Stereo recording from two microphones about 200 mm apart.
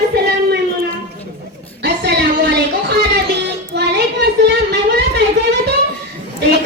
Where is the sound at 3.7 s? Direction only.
55° right (ahead or behind).